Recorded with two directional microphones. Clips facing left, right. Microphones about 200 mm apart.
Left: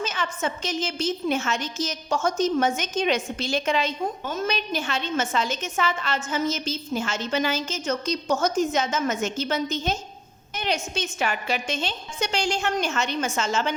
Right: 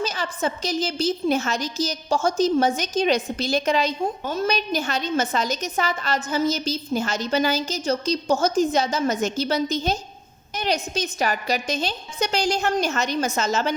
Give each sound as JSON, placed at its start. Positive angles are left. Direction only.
{"t": 0.0, "sound": "a woman's voice", "side_deg": -35}